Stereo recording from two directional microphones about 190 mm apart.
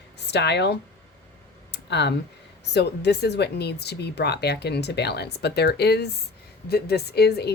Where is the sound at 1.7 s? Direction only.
65° left (ahead or behind).